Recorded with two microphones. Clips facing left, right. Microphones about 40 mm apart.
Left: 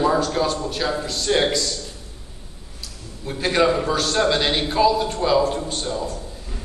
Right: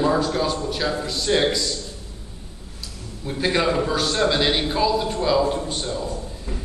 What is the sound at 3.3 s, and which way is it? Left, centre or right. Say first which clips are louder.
A man's voice: left 2 dB; centre.